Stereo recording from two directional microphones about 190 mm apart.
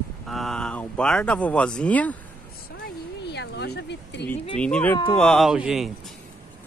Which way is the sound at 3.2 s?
60° left (ahead or behind).